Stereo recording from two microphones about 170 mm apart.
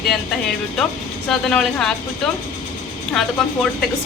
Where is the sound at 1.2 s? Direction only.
5° left (ahead or behind).